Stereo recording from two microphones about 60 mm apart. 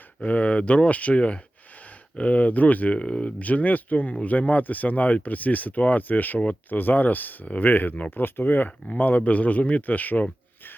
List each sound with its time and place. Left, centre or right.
0.2 s speech: centre